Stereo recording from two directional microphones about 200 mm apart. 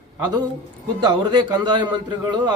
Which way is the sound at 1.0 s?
25° right (ahead or behind).